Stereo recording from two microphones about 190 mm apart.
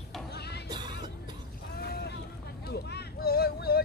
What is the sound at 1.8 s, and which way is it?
Boat, 60° left (ahead or behind).